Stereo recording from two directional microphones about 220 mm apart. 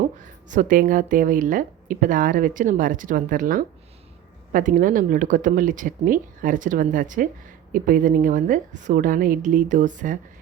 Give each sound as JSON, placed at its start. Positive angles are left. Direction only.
{"t": 0.4, "sound": "speech", "side_deg": -35}